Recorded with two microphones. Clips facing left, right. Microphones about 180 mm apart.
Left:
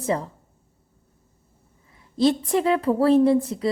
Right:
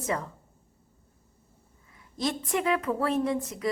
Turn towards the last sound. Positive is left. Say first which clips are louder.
# left 10 dB
turn(degrees=30)  # may be behind; listen again after turning